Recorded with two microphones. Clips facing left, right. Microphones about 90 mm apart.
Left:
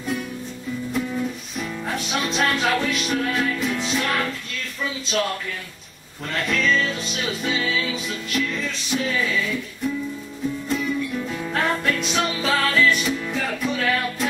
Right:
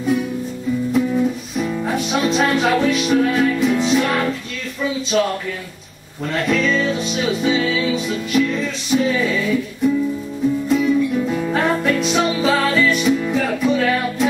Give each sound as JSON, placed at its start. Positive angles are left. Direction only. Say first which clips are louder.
{"t": 0.9, "sound": "music", "louder": "right 7 dB", "side_deg": -5}
{"t": 4.8, "sound": "a sound", "louder": "right 7 dB", "side_deg": -5}
{"t": 6.3, "sound": "music", "louder": "right 4 dB", "side_deg": 0}
{"t": 10.7, "sound": "music", "louder": "right 8 dB", "side_deg": -5}